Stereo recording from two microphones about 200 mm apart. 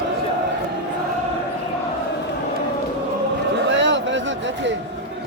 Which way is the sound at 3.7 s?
65° right (ahead or behind).